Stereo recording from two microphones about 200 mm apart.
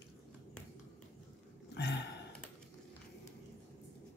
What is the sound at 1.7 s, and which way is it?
Gasp, 60° left (ahead or behind).